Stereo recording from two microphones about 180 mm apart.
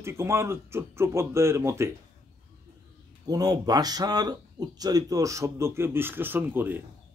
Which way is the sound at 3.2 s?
20° right (ahead or behind).